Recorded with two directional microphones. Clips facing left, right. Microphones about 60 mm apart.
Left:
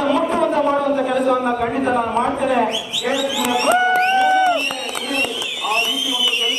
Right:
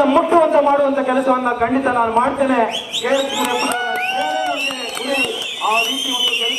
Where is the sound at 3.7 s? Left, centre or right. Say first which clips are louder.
Left 5 dB; centre.